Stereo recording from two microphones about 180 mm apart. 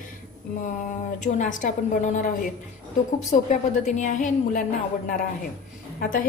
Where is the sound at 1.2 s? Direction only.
45° left (ahead or behind).